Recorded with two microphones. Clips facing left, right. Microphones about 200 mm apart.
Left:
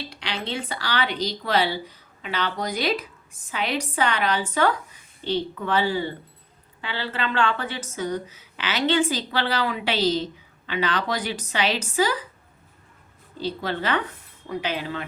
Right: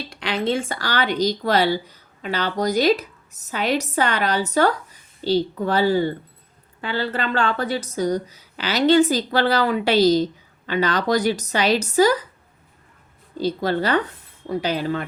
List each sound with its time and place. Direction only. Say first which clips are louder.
0.1 s a woman's voice: right 12 dB; 50° right (ahead or behind)
13.4 s a woman's voice: right 6 dB; 40° right (ahead or behind)